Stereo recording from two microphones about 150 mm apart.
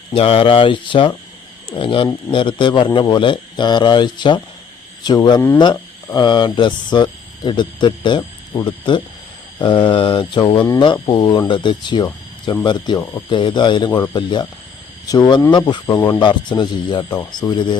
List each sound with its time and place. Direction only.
0.1 s speech: 40° left (ahead or behind)